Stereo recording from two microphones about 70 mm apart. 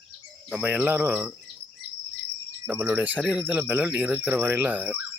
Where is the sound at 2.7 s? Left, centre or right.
Right.